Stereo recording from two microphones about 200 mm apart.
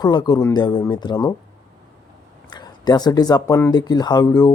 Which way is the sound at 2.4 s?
20° left (ahead or behind).